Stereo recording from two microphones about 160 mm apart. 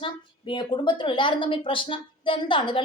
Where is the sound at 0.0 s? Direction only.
30° left (ahead or behind).